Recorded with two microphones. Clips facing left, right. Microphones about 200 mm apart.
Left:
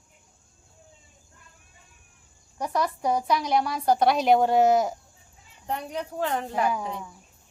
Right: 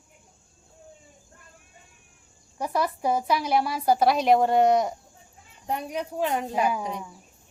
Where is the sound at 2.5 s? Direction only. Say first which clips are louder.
Even; 5° right (ahead or behind).